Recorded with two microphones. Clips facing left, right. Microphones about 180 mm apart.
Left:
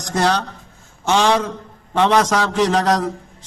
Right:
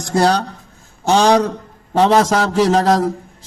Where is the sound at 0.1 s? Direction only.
35° right (ahead or behind).